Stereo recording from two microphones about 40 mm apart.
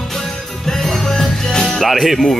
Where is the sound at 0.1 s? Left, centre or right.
Centre.